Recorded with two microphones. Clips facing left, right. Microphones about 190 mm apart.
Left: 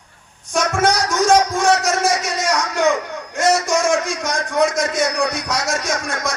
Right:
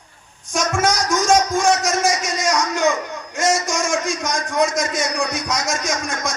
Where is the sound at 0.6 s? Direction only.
60° left (ahead or behind).